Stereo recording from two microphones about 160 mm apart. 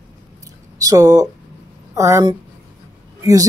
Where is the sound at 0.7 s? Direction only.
20° right (ahead or behind).